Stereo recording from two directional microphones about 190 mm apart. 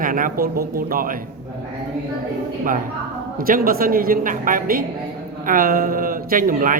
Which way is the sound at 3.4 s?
50° right (ahead or behind).